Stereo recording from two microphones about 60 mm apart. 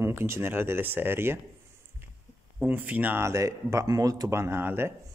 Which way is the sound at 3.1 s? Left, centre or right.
Right.